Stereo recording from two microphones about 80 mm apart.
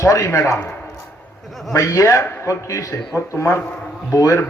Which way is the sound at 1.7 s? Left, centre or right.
Left.